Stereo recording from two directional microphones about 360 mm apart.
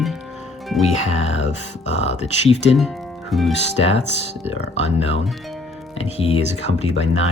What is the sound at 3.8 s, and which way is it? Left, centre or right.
Speech, left.